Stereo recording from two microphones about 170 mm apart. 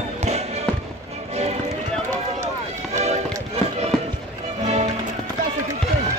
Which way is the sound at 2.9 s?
40° right (ahead or behind).